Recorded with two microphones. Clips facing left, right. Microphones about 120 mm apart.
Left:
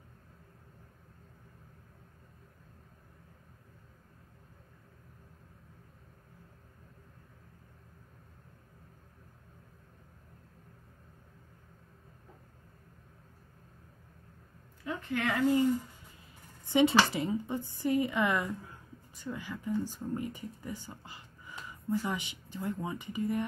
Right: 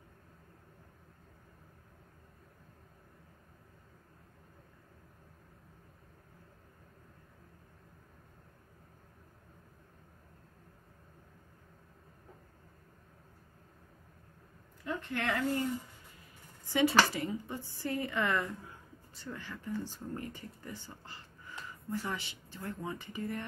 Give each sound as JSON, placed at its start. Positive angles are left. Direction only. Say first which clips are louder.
{"t": 15.0, "sound": "speech", "louder": "left 3 dB", "side_deg": 0}
{"t": 16.6, "sound": "a sound", "louder": "left 4 dB", "side_deg": 20}
{"t": 17.1, "sound": "speech", "louder": "left 4 dB", "side_deg": 20}